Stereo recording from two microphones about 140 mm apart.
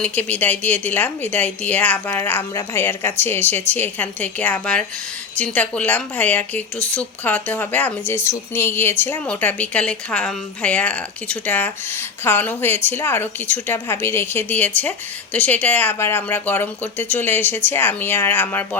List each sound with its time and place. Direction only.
0.0 s a woman's voice: 10° left (ahead or behind)